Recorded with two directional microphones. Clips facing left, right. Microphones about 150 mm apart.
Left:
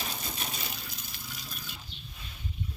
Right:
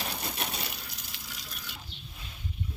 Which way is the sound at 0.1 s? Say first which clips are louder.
Right 3 dB; 65° right (ahead or behind).